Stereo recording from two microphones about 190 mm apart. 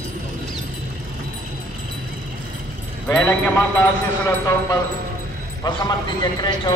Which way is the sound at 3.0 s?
20° left (ahead or behind).